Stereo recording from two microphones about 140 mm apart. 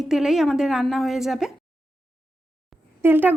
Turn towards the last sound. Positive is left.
turn(degrees=-15)  # may be behind; listen again after turning